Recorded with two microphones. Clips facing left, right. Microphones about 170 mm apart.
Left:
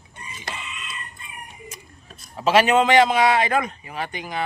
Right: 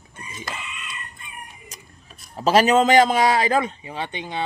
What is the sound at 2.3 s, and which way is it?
A man's voice, 40° right (ahead or behind).